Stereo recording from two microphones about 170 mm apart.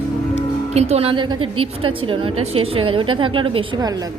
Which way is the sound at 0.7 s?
40° right (ahead or behind).